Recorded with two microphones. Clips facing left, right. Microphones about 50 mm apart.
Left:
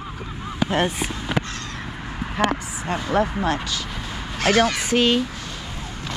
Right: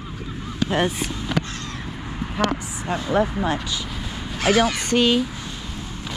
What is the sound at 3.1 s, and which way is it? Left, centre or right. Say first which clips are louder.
Speech: even; centre.